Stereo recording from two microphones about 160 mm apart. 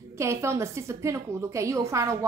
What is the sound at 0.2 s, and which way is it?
A woman's voice, 15° right (ahead or behind).